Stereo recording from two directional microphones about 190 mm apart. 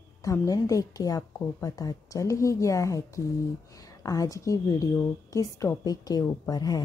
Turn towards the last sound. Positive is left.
turn(degrees=20)  # may be behind; listen again after turning